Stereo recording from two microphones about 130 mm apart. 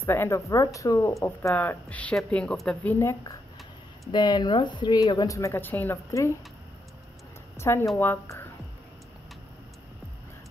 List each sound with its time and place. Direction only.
0.0 s a woman's voice: 20° left (ahead or behind)
2.8 s speech: 15° left (ahead or behind)
4.1 s speech: 35° left (ahead or behind); by 6.3 s 20° left (ahead or behind)
7.5 s a woman's voice: 20° left (ahead or behind)